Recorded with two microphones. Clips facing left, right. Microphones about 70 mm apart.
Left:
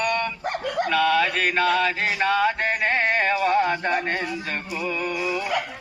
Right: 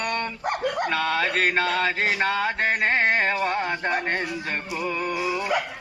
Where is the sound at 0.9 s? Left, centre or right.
Right.